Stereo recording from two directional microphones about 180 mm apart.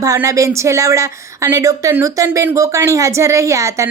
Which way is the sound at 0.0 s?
20° right (ahead or behind).